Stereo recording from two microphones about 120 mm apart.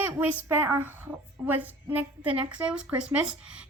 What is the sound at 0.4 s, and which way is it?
A woman's voice, 20° right (ahead or behind).